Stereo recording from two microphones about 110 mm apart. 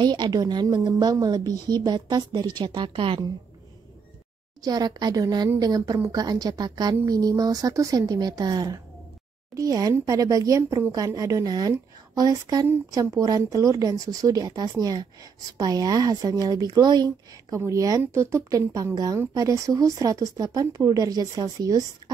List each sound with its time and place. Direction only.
0.0 s speech: 40° right (ahead or behind)
4.6 s speech: 40° right (ahead or behind)
17.6 s speech: 30° right (ahead or behind)